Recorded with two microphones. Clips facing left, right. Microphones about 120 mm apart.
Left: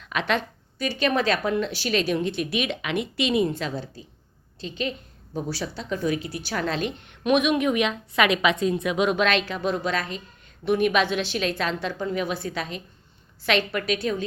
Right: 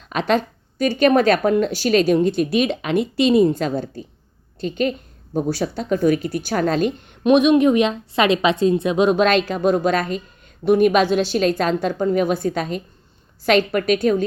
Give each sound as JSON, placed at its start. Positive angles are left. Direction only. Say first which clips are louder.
{"t": 0.0, "sound": "a woman's voice", "louder": "right 6 dB", "side_deg": -40}
{"t": 7.3, "sound": "a woman's voice", "louder": "right 7 dB", "side_deg": -30}